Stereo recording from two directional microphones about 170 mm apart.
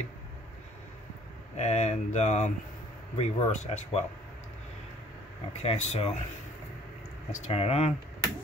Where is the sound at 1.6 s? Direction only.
40° left (ahead or behind).